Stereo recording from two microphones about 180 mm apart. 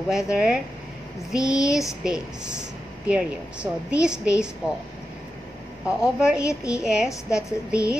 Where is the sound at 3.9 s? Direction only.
5° right (ahead or behind).